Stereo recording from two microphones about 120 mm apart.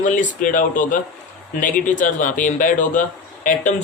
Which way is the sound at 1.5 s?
90° left.